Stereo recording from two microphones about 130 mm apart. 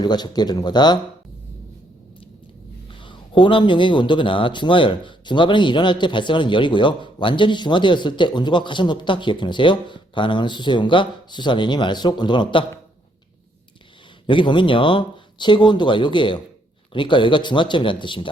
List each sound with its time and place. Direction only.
0.0 s speech: 35° left (ahead or behind)
3.0 s speech: 40° left (ahead or behind)
14.3 s speech: 40° left (ahead or behind)